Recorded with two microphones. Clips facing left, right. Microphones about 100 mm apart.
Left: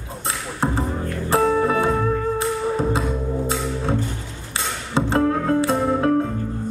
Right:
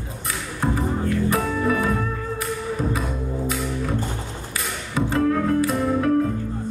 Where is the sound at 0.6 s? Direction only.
30° left (ahead or behind).